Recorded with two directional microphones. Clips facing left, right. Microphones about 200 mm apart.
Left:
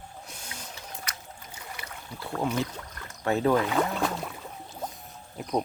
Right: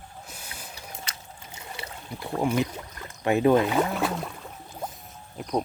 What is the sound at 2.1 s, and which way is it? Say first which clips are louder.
Speech: right 4 dB; 15° right (ahead or behind).